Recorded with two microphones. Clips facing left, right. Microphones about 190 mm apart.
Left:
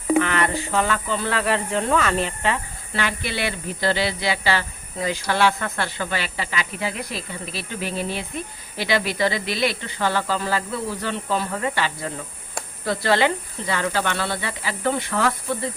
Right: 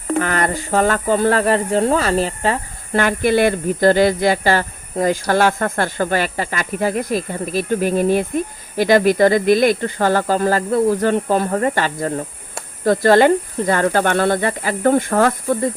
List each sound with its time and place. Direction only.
0.2 s speech: 40° right (ahead or behind)